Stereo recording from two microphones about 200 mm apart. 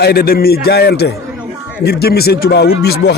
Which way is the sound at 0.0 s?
50° left (ahead or behind).